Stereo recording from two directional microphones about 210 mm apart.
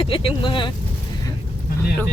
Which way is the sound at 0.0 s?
25° left (ahead or behind).